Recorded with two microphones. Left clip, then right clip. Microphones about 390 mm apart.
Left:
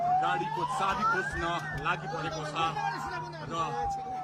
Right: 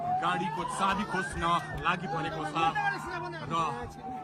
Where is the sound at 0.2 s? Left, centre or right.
Centre.